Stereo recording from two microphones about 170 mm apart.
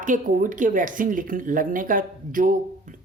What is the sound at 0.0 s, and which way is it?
Speech, 50° right (ahead or behind).